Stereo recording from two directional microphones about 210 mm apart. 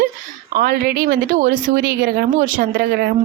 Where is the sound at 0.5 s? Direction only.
45° right (ahead or behind).